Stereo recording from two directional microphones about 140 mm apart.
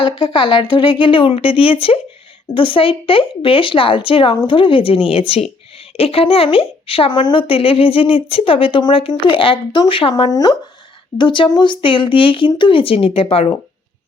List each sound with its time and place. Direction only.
0.0 s a woman's voice: 40° left (ahead or behind)